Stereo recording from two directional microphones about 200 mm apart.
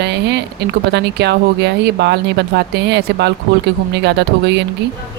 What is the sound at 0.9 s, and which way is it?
Speech, 55° right (ahead or behind).